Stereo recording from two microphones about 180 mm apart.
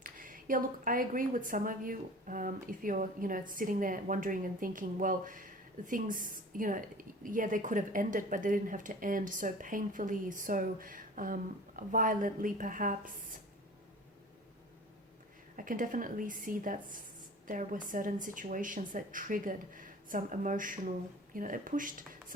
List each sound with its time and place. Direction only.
0.0 s a woman's voice: 50° right (ahead or behind)
15.5 s a woman's voice: 50° right (ahead or behind)